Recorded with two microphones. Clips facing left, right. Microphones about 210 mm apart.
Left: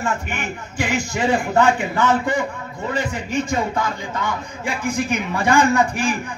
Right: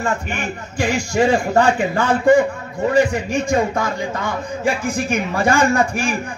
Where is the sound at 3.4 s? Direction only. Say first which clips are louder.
Right 4 dB; 45° right (ahead or behind).